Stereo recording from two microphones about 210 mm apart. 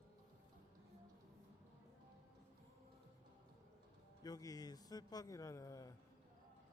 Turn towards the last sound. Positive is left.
turn(degrees=15)  # may be behind; listen again after turning